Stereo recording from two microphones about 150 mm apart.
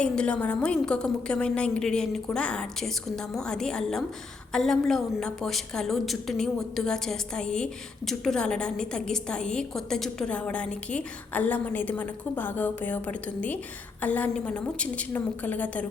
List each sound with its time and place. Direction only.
0.0 s a woman's voice: 5° left (ahead or behind)